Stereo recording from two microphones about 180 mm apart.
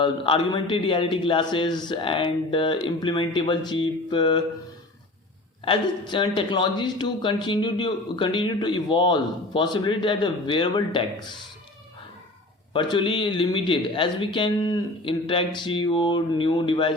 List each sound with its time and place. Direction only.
0.0 s speech: 30° left (ahead or behind)
5.6 s speech: 30° left (ahead or behind)
12.7 s speech: 25° left (ahead or behind)